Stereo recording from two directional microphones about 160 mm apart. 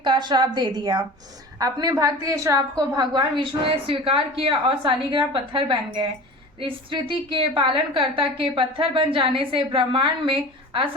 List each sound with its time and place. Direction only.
0.0 s a woman's voice: 30° right (ahead or behind)